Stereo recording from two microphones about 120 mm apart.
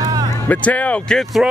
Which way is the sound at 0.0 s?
30° right (ahead or behind).